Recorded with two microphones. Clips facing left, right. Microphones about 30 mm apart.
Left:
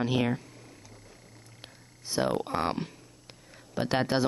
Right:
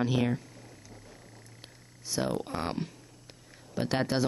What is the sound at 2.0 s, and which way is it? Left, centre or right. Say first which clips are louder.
Speech: left 3 dB; left.